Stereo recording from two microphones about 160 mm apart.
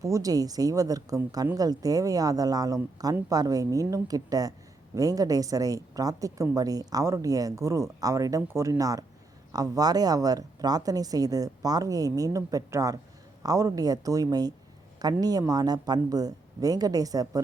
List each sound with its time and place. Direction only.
0.0 s a woman's voice: 20° right (ahead or behind)